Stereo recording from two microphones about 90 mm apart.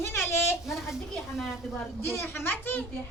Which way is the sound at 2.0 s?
25° left (ahead or behind).